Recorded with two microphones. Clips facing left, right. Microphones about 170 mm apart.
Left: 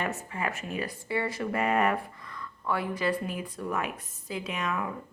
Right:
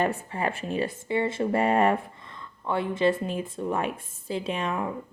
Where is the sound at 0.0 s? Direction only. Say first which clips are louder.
Right 6 dB; 30° right (ahead or behind).